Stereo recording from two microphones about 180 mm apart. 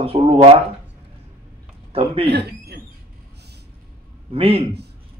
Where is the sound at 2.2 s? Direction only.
65° right (ahead or behind).